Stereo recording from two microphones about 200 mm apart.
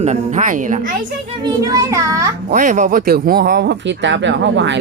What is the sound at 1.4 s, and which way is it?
Speech, 15° right (ahead or behind).